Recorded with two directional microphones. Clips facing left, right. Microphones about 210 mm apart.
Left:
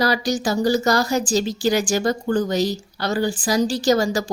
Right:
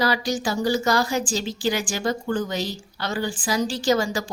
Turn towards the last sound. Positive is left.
turn(degrees=40)  # may be behind; listen again after turning